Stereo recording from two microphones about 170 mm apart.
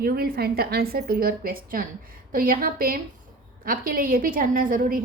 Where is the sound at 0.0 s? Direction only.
65° right (ahead or behind).